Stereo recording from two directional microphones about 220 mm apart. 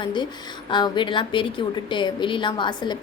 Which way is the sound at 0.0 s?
20° left (ahead or behind).